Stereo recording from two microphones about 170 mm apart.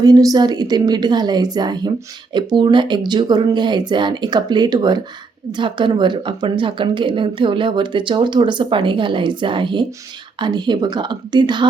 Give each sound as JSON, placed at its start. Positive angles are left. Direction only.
{"t": 0.0, "sound": "a woman's voice", "side_deg": -20}